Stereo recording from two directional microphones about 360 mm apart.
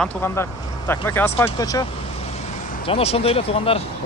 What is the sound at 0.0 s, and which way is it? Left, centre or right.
Speech, centre.